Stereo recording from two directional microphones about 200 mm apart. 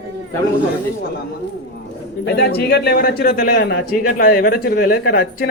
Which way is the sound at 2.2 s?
55° left (ahead or behind).